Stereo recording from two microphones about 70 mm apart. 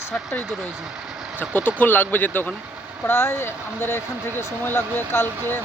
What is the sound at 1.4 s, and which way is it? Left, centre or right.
Speech, left.